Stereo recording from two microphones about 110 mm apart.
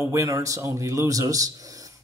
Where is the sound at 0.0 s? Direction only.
25° right (ahead or behind).